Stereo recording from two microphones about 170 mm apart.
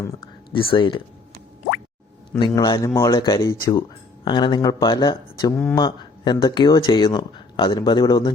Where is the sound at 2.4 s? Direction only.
25° left (ahead or behind).